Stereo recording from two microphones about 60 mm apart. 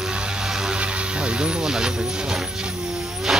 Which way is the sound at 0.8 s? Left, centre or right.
Centre.